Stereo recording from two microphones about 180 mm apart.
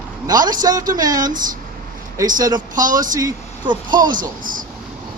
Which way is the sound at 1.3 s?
45° right (ahead or behind).